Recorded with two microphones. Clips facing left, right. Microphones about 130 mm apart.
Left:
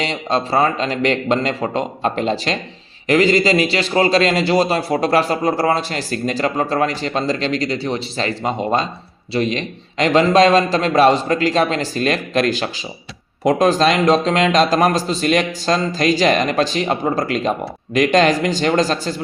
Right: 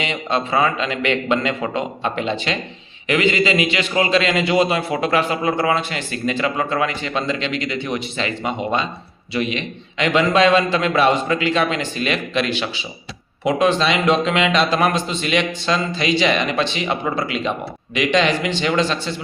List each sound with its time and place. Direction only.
0.0 s a man's voice: 35° left (ahead or behind)